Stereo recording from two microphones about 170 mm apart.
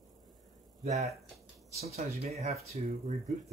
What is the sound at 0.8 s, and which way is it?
Speech, 40° right (ahead or behind).